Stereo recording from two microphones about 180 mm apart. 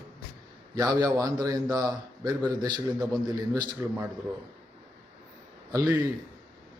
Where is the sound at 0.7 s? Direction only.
20° right (ahead or behind).